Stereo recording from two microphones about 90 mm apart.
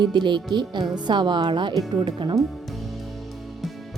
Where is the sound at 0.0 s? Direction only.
60° right (ahead or behind).